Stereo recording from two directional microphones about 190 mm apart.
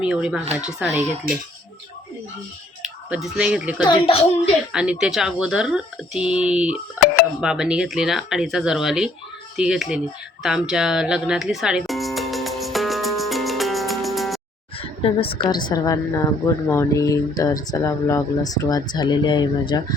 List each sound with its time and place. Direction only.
0.0 s speech: 5° right (ahead or behind)
0.9 s speech: 35° right (ahead or behind)
2.8 s speech: 5° right (ahead or behind)
3.8 s speech: 25° left (ahead or behind)
4.7 s speech: 5° right (ahead or behind)
10.4 s music: 5° right (ahead or behind)
14.8 s speech: 30° left (ahead or behind)